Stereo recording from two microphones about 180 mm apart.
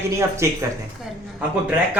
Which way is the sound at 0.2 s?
15° right (ahead or behind).